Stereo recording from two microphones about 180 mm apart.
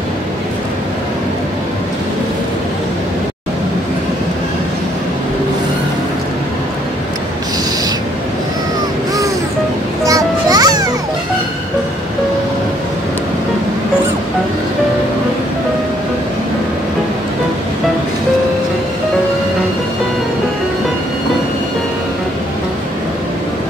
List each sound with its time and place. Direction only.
10.0 s music: 20° right (ahead or behind)